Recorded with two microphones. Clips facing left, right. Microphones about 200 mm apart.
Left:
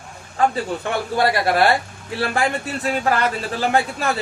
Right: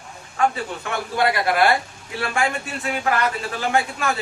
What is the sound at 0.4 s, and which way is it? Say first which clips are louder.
Speech: left 2 dB; 35° left (ahead or behind).